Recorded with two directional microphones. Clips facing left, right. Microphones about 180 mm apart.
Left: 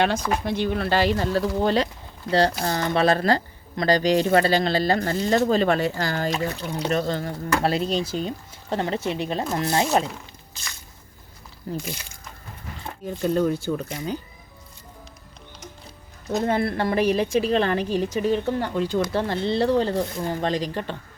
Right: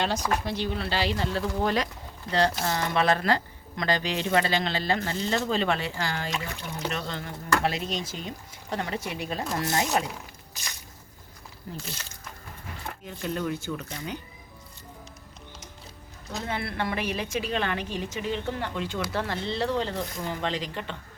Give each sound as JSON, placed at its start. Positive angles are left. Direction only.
{"t": 0.4, "sound": "speech", "side_deg": 55}
{"t": 2.3, "sound": "speech", "side_deg": -25}
{"t": 2.6, "sound": "speech", "side_deg": 35}
{"t": 11.7, "sound": "speech", "side_deg": 35}
{"t": 13.1, "sound": "speech", "side_deg": 40}
{"t": 16.3, "sound": "speech", "side_deg": 50}